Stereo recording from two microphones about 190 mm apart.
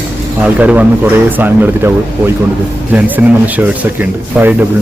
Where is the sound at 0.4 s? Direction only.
10° right (ahead or behind).